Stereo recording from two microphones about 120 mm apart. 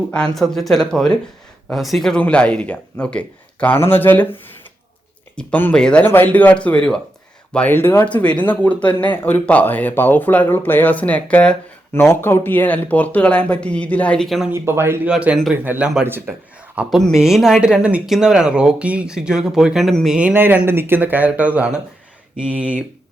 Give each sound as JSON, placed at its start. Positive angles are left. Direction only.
{"t": 0.1, "sound": "speech", "side_deg": 5}
{"t": 5.4, "sound": "speech", "side_deg": 15}
{"t": 14.5, "sound": "speech", "side_deg": -20}
{"t": 16.7, "sound": "speech", "side_deg": 0}
{"t": 20.1, "sound": "speech", "side_deg": -15}